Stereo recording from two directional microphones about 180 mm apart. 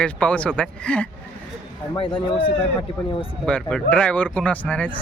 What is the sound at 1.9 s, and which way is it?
Speech, 25° left (ahead or behind).